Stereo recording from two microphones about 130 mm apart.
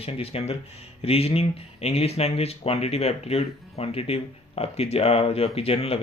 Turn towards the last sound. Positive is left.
turn(degrees=45)  # may be behind; listen again after turning